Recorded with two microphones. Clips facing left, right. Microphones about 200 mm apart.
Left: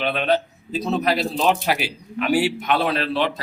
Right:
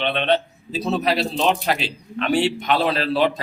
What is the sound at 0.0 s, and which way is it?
Speech, 5° left (ahead or behind).